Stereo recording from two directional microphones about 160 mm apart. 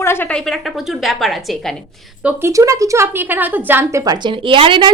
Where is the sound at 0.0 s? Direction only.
15° left (ahead or behind).